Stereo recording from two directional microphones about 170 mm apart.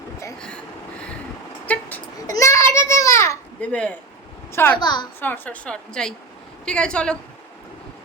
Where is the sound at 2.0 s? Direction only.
20° left (ahead or behind).